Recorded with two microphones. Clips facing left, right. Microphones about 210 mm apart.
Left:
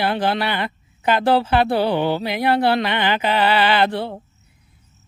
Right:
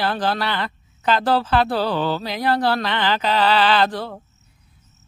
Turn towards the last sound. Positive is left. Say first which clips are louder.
# even
turn(degrees=10)  # may be behind; listen again after turning